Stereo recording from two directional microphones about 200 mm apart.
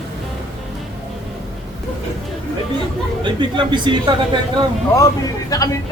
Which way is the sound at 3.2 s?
25° right (ahead or behind).